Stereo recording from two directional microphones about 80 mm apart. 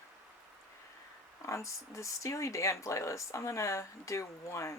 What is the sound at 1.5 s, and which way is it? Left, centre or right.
Speech, left.